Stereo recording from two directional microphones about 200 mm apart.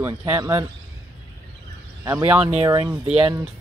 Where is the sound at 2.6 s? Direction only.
20° right (ahead or behind).